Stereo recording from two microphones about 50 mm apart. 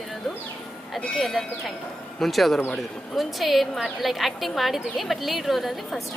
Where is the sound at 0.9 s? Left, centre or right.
Centre.